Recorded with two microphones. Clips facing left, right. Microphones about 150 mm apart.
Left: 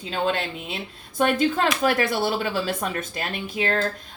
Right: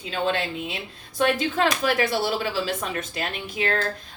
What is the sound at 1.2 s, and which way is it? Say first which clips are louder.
Speech: left 1 dB; 50° left (ahead or behind).